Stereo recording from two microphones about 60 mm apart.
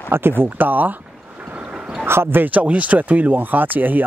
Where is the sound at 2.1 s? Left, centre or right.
Right.